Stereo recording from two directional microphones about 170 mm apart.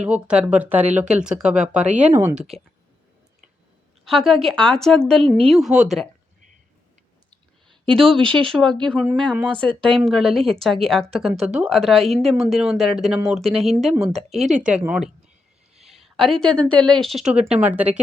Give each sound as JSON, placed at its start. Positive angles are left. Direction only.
{"t": 0.0, "sound": "speech", "side_deg": -5}
{"t": 4.0, "sound": "speech", "side_deg": 0}
{"t": 7.3, "sound": "clicking", "side_deg": -30}
{"t": 8.1, "sound": "speech", "side_deg": -30}
{"t": 8.4, "sound": "speech", "side_deg": 0}